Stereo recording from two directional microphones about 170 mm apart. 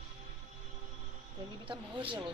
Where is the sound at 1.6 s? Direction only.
30° right (ahead or behind).